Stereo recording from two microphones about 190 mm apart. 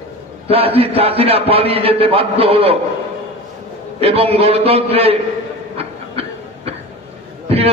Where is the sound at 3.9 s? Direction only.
30° right (ahead or behind).